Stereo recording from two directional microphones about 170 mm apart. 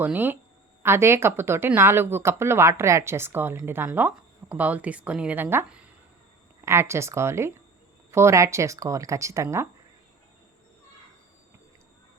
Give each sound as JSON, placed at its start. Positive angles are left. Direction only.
{"t": 0.0, "sound": "speech", "side_deg": -10}